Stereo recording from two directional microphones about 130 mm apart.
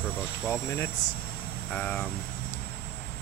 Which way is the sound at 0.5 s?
20° left (ahead or behind).